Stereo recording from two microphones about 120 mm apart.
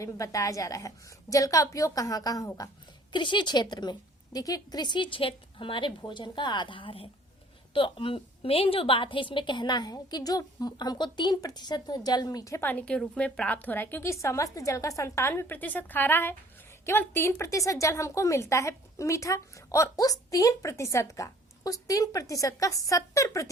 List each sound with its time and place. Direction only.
0.0 s a woman's voice: 25° left (ahead or behind)
3.1 s a woman's voice: 40° left (ahead or behind)
12.6 s a woman's voice: 10° left (ahead or behind); by 23.5 s 25° left (ahead or behind)